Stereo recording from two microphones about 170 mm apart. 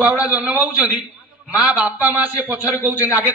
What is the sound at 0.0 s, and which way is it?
A man's voice, 10° right (ahead or behind).